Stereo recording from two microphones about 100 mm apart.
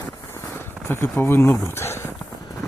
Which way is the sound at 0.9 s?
25° left (ahead or behind).